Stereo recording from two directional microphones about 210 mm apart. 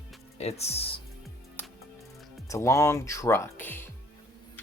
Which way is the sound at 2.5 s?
15° left (ahead or behind).